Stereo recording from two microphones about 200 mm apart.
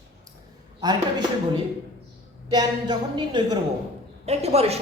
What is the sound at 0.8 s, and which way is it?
Speech, 20° right (ahead or behind).